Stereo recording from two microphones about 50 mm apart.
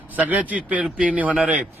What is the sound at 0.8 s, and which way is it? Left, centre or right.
Speech, centre.